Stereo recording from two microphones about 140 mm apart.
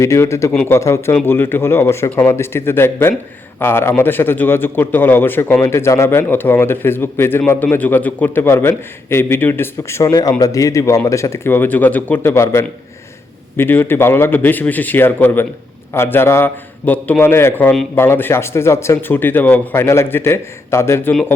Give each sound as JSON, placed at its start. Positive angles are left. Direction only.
{"t": 0.0, "sound": "speech", "side_deg": 20}
{"t": 0.5, "sound": "a man's voice", "side_deg": 10}
{"t": 0.8, "sound": "a man's voice", "side_deg": 20}